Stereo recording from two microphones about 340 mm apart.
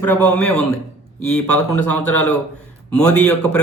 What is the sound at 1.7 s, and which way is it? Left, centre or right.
A man's voice, centre.